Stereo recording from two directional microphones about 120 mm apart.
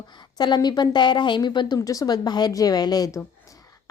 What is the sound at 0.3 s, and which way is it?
A woman's voice, 35° left (ahead or behind).